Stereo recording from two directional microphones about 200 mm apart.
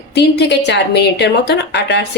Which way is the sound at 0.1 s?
60° left (ahead or behind).